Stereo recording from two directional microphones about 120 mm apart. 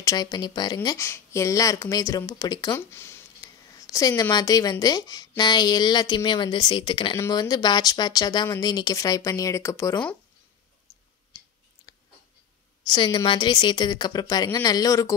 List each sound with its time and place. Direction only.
0.0 s speech: 30° left (ahead or behind)
0.8 s speech: 25° left (ahead or behind)
2.7 s a sound: 20° left (ahead or behind)
4.2 s speech: 30° left (ahead or behind)
10.9 s clicking: 25° left (ahead or behind)
12.8 s speech: 40° left (ahead or behind)